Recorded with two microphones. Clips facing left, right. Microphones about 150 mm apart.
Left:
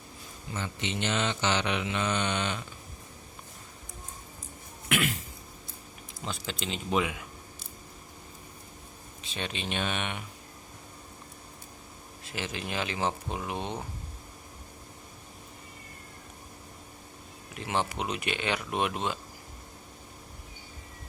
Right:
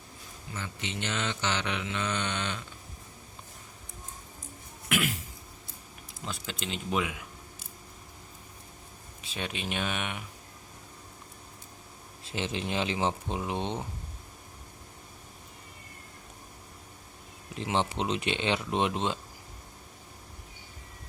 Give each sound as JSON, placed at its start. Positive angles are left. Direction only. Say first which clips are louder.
{"t": 0.5, "sound": "mantra", "louder": "left 3 dB", "side_deg": 25}
{"t": 4.9, "sound": "throat clearing", "louder": "left 1 dB", "side_deg": -5}
{"t": 6.2, "sound": "speech", "louder": "left 2 dB", "side_deg": 0}
{"t": 9.2, "sound": "speech", "louder": "even", "side_deg": -5}
{"t": 12.2, "sound": "speech", "louder": "right 3 dB", "side_deg": -25}
{"t": 17.5, "sound": "speech", "louder": "right 1 dB", "side_deg": -25}